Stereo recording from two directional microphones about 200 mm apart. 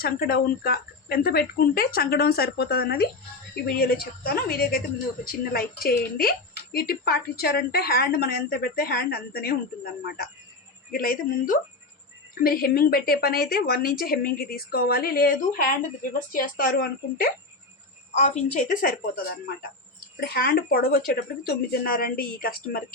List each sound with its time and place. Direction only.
0.0 s a woman's voice: 50° left (ahead or behind)
18.1 s a woman's voice: 35° left (ahead or behind)